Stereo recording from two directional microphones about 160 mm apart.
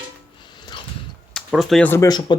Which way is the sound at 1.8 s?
15° left (ahead or behind).